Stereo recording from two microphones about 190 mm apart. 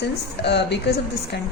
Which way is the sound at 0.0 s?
60° left (ahead or behind).